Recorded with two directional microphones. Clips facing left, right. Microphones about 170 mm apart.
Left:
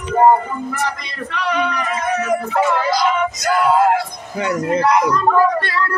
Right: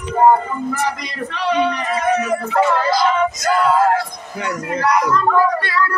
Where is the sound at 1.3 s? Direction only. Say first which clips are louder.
Right 2 dB; 30° right (ahead or behind).